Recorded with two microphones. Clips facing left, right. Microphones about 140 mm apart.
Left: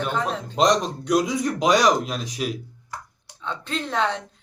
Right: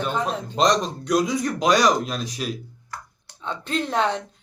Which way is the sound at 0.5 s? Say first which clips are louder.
Left 1 dB; 10° left (ahead or behind).